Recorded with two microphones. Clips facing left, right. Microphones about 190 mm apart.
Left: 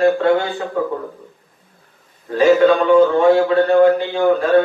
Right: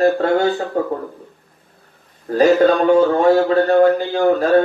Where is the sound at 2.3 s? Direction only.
40° right (ahead or behind).